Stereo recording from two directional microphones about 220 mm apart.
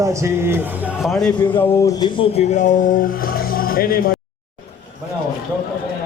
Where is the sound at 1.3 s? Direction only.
20° left (ahead or behind); by 4.1 s 40° left (ahead or behind).